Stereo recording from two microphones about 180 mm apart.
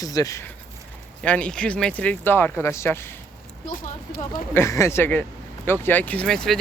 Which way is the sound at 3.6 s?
50° left (ahead or behind).